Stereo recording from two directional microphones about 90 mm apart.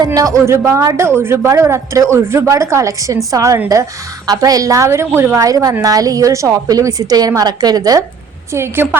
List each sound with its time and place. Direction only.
0.0 s a woman's voice: 40° right (ahead or behind)
5.4 s a woman's voice: 40° right (ahead or behind)
8.5 s a woman's voice: 25° right (ahead or behind)